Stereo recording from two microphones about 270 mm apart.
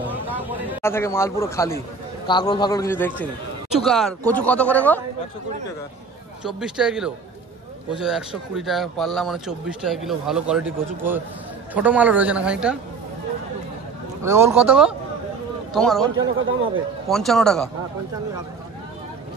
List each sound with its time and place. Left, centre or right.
0.0 s a sound: centre
0.8 s a man's voice: centre
6.4 s speech: centre
14.2 s speech: centre
16.3 s speech: right
17.1 s speech: centre